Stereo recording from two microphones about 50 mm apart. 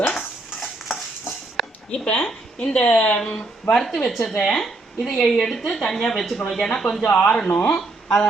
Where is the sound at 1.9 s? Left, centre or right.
Left.